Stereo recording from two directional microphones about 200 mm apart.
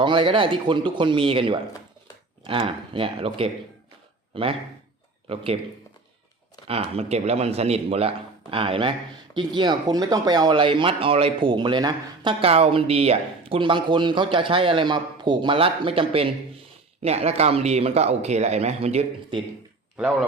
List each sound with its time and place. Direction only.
0.0 s speech: 25° right (ahead or behind)
6.7 s speech: 30° right (ahead or behind)